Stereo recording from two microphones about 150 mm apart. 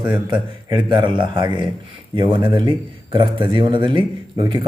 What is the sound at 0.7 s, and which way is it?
A man's voice, 35° right (ahead or behind).